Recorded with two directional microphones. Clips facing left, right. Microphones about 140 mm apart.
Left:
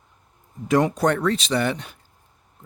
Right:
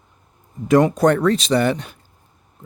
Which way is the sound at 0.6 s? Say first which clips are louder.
Right 5 dB; 50° right (ahead or behind).